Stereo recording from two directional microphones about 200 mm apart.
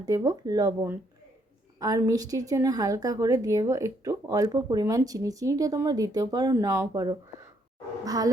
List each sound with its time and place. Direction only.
0.0 s a woman's voice: 15° right (ahead or behind)